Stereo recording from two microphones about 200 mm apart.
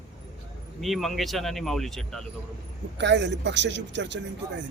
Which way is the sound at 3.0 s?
60° right (ahead or behind).